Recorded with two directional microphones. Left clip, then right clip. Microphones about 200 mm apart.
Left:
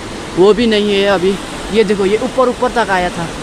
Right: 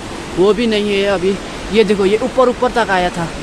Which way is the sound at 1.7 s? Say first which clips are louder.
Even; 5° right (ahead or behind).